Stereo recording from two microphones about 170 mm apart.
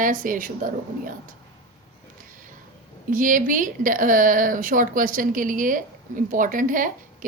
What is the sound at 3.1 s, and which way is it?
A woman's voice, 50° right (ahead or behind).